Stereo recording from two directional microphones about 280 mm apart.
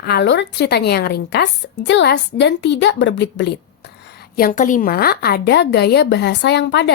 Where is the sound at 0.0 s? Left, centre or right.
Left.